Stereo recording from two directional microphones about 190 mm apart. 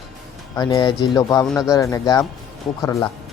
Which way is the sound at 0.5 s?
20° left (ahead or behind).